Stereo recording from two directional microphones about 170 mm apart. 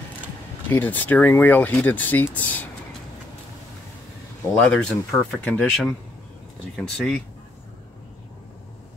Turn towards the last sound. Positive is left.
turn(degrees=5)  # may be behind; listen again after turning